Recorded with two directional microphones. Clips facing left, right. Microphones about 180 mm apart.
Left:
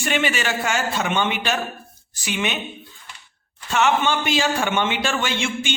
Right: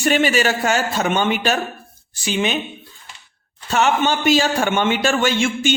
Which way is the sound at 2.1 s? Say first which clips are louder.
Right 4 dB; 30° right (ahead or behind).